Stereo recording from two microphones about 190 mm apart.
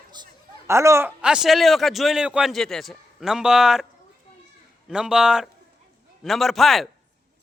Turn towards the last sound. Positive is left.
turn(degrees=0)  # may be behind; listen again after turning